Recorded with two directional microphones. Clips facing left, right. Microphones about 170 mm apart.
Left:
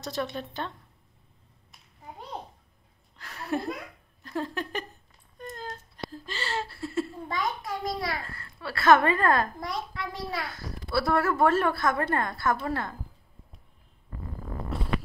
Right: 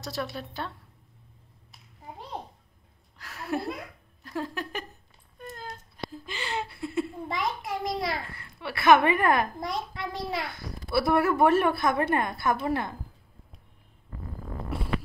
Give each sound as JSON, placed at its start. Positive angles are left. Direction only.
{"t": 0.0, "sound": "a woman's voice", "side_deg": -5}
{"t": 3.2, "sound": "a sound", "side_deg": -10}
{"t": 4.2, "sound": "speech", "side_deg": -10}